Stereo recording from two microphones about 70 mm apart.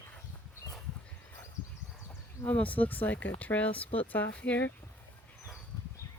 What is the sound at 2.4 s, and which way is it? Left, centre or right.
Speech, left.